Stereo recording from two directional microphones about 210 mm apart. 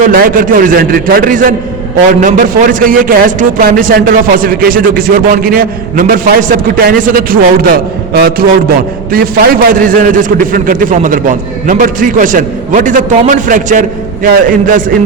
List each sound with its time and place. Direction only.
0.0 s a man's voice: 40° right (ahead or behind)